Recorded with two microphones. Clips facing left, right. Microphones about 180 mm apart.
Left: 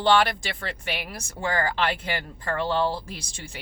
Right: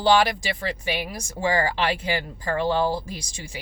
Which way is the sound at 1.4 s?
15° right (ahead or behind).